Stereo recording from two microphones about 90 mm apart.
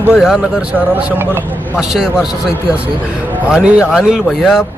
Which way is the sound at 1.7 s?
5° right (ahead or behind).